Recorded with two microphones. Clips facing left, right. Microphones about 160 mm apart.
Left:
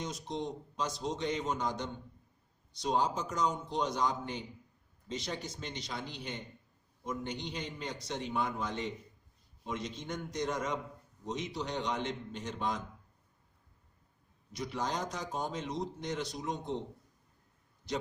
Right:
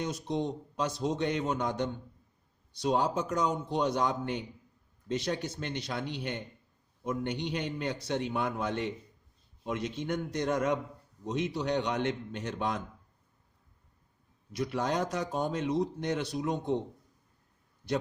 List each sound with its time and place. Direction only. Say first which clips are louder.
0.0 s a man's voice: right 5 dB; 60° right (ahead or behind)
14.5 s a man's voice: right 5 dB; 60° right (ahead or behind)